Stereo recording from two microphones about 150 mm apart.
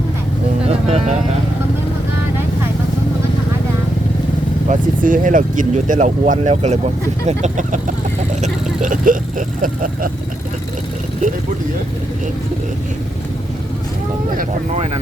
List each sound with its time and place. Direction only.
0.7 s speech: 45° right (ahead or behind)
4.7 s speech: 65° right (ahead or behind)
8.4 s vehicle: 60° right (ahead or behind)
9.6 s speech: 65° right (ahead or behind)
14.3 s speech: 65° right (ahead or behind)